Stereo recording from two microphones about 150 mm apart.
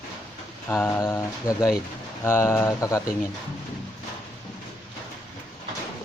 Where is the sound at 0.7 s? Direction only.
15° left (ahead or behind).